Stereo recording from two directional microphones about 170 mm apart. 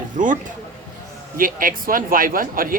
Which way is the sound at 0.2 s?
50° right (ahead or behind).